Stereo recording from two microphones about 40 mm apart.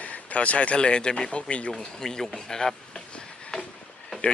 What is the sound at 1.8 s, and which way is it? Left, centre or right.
Speech, centre.